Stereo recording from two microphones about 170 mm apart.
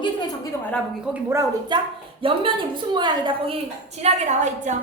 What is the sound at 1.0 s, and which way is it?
A woman's voice, 10° right (ahead or behind).